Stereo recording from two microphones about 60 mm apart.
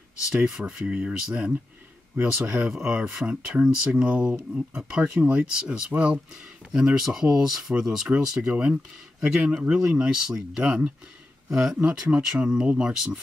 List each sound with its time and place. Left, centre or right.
0.3 s speech: centre
7.0 s speech: centre